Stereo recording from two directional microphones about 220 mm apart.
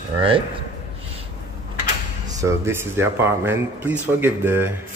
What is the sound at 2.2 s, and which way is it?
A man's voice, 15° right (ahead or behind).